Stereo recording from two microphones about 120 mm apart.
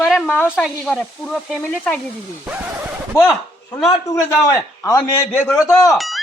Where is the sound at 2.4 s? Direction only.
10° right (ahead or behind).